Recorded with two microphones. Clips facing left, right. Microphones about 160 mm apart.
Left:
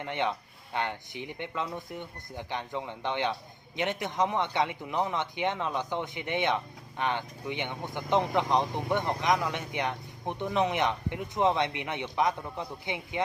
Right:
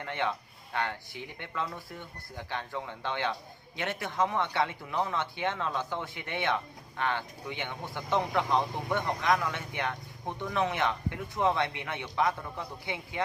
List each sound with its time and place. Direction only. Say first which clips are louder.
0.0 s speech: left 2 dB; 20° left (ahead or behind)